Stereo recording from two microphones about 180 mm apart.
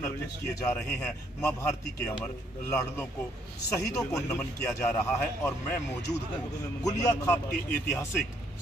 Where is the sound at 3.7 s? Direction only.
15° left (ahead or behind).